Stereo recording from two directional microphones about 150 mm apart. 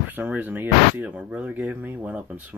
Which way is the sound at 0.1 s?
10° right (ahead or behind).